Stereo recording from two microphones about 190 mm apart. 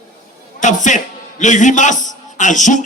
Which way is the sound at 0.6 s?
40° left (ahead or behind).